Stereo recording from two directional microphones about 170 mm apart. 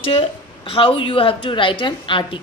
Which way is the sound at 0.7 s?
30° left (ahead or behind).